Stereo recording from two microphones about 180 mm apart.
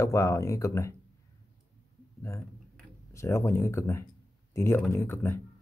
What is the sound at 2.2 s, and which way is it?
Speech, 15° left (ahead or behind).